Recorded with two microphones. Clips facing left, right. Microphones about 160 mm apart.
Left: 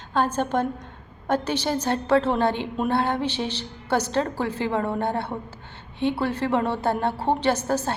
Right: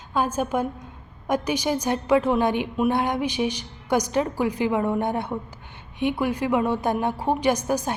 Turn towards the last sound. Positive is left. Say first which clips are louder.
# right 1 dB
turn(degrees=-15)  # may be behind; listen again after turning